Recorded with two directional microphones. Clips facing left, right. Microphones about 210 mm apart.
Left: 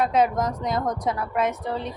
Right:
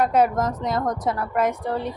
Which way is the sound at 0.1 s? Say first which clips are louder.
Right 2 dB; 10° right (ahead or behind).